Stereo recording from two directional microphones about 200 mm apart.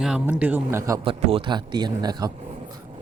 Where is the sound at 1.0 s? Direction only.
25° right (ahead or behind).